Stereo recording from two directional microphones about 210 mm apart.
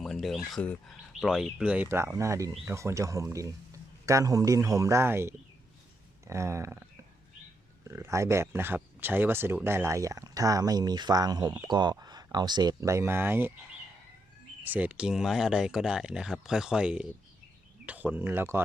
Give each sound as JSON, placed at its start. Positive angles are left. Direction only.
{"t": 0.0, "sound": "speech", "side_deg": 0}
{"t": 7.9, "sound": "speech", "side_deg": -15}
{"t": 14.6, "sound": "speech", "side_deg": -10}